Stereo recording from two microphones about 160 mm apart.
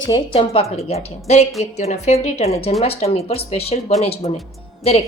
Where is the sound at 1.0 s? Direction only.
45° left (ahead or behind).